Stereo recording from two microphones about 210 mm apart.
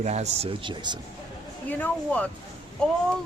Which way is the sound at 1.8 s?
5° left (ahead or behind).